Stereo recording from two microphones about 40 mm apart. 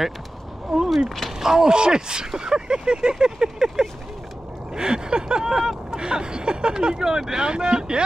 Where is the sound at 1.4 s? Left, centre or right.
Centre.